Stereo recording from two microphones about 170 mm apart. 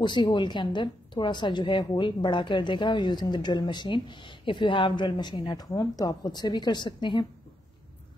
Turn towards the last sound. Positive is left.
turn(degrees=25)  # may be behind; listen again after turning